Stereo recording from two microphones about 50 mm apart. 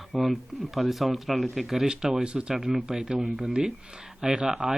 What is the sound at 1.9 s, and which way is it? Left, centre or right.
A man's voice, centre.